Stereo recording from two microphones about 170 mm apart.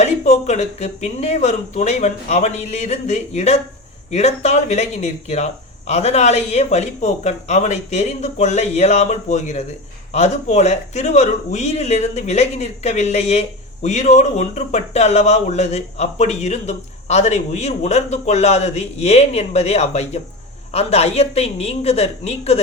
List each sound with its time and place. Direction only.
0.0 s speech: 40° left (ahead or behind)